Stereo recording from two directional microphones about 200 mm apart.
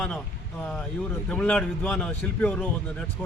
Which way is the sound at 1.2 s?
5° left (ahead or behind).